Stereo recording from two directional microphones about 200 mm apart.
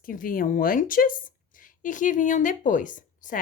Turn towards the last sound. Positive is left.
turn(degrees=40)  # may be behind; listen again after turning